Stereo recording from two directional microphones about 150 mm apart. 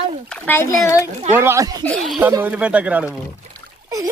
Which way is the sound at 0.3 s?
10° left (ahead or behind).